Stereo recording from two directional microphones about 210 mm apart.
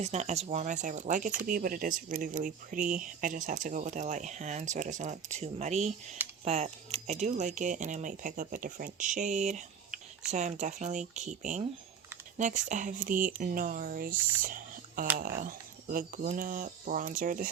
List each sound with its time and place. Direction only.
0.0 s speech: 30° right (ahead or behind)
14.4 s whispering: 40° right (ahead or behind)
15.2 s speech: 40° right (ahead or behind)